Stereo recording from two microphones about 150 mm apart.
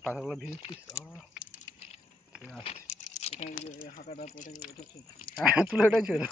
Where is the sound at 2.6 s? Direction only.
50° left (ahead or behind).